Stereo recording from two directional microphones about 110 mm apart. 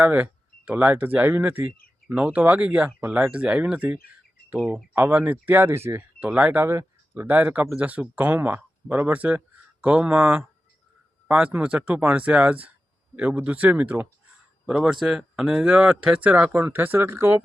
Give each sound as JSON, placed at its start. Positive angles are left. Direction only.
{"t": 0.0, "sound": "speech", "side_deg": -15}
{"t": 6.1, "sound": "speech", "side_deg": -10}